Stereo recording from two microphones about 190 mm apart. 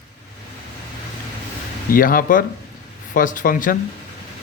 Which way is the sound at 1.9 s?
45° left (ahead or behind).